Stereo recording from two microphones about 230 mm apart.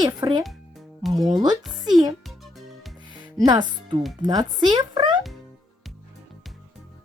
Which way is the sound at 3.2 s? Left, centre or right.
Centre.